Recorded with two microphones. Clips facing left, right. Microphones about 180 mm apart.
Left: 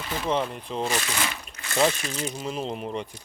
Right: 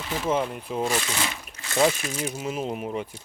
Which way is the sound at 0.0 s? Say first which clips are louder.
Right 1 dB; 5° right (ahead or behind).